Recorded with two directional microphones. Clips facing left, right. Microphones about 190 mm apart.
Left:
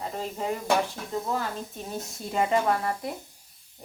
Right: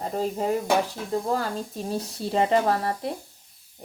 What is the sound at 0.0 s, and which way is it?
Speech, 40° right (ahead or behind).